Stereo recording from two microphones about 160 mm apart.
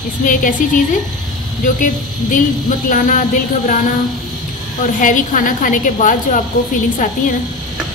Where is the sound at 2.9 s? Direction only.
55° left (ahead or behind).